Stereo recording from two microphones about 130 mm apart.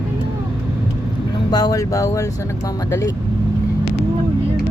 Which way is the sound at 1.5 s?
30° left (ahead or behind).